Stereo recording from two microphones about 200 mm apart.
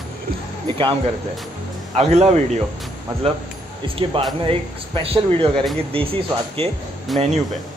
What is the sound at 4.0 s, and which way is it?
Speech, 25° right (ahead or behind).